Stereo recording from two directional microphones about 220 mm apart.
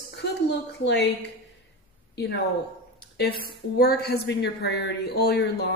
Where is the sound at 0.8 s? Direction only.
50° left (ahead or behind).